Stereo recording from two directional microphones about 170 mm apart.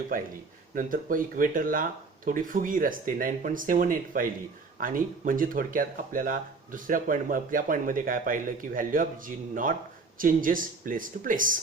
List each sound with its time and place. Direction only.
0.1 s speech: 55° right (ahead or behind)